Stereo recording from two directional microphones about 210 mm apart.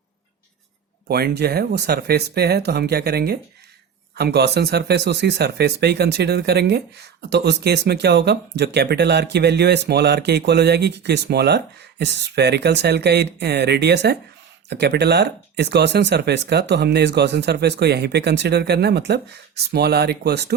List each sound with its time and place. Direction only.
1.0 s speech: 50° right (ahead or behind)